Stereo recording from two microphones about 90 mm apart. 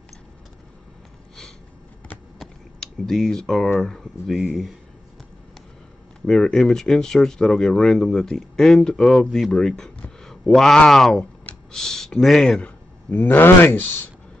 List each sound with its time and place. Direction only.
2.3 s a sound: 5° left (ahead or behind)
3.8 s speech: 5° left (ahead or behind)
6.2 s speech: 5° left (ahead or behind)
12.6 s speech: 20° left (ahead or behind)